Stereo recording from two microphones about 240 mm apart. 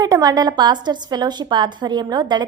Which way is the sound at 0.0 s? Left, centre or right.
Centre.